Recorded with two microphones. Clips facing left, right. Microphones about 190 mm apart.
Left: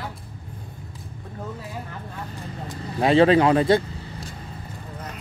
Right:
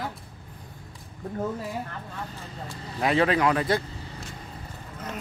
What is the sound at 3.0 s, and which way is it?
Speech, 30° left (ahead or behind).